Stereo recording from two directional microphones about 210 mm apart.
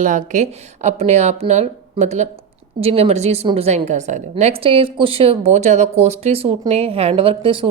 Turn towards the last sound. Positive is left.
turn(degrees=-25)  # may be behind; listen again after turning